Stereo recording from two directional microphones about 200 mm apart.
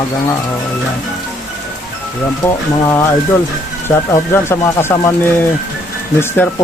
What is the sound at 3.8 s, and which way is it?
Speech, 10° left (ahead or behind).